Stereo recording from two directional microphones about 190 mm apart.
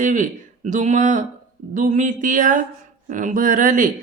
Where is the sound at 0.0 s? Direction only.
45° right (ahead or behind).